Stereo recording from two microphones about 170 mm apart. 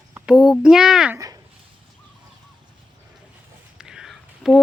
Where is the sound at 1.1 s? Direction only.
20° right (ahead or behind).